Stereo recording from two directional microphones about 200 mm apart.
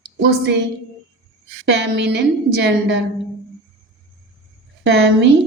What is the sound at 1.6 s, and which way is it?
Speech, 60° right (ahead or behind).